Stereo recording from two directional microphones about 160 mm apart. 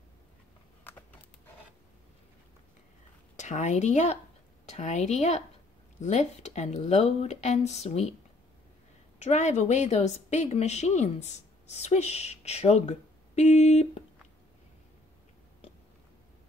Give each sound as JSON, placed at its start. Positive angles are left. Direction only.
{"t": 3.3, "sound": "speech", "side_deg": 50}
{"t": 9.2, "sound": "speech", "side_deg": 45}